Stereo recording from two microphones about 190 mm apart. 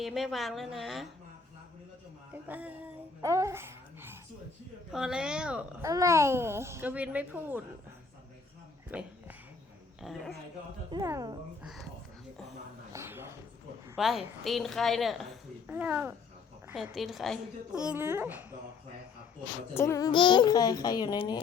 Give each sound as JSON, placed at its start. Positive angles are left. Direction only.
{"t": 0.0, "sound": "a woman's voice", "side_deg": 0}
{"t": 2.3, "sound": "a child's voice", "side_deg": -10}
{"t": 3.2, "sound": "babbling", "side_deg": -15}
{"t": 4.9, "sound": "a woman's voice", "side_deg": -5}
{"t": 5.8, "sound": "a child's voice", "side_deg": -15}
{"t": 8.9, "sound": "a sound", "side_deg": -10}
{"t": 10.0, "sound": "a woman's voice", "side_deg": 0}
{"t": 10.9, "sound": "speech", "side_deg": -15}
{"t": 11.6, "sound": "a woman's voice", "side_deg": 0}
{"t": 12.9, "sound": "a sound", "side_deg": -15}
{"t": 13.9, "sound": "a woman's voice", "side_deg": 0}
{"t": 19.7, "sound": "a child's voice", "side_deg": 15}